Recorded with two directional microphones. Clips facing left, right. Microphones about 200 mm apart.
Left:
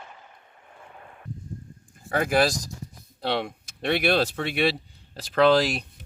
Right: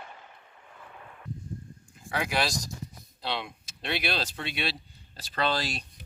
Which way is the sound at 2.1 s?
45° left (ahead or behind).